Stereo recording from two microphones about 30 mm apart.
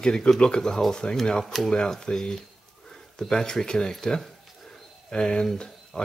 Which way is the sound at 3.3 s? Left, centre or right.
Centre.